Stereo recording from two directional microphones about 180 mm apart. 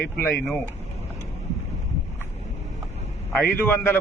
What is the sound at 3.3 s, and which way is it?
Speech, 10° left (ahead or behind).